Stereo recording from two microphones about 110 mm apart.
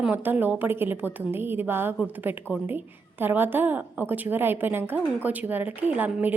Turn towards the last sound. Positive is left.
turn(degrees=-15)  # may be behind; listen again after turning